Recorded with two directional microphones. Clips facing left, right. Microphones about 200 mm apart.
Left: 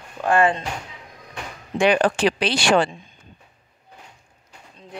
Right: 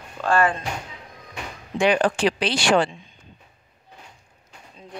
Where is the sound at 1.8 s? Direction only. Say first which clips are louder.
Left 1 dB; 65° left (ahead or behind).